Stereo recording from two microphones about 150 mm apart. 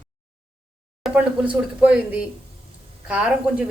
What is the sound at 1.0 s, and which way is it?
Speech, 5° right (ahead or behind).